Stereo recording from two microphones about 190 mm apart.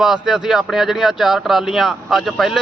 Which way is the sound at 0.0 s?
5° right (ahead or behind).